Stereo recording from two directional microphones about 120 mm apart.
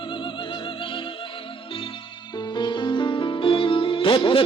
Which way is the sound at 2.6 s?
40° left (ahead or behind).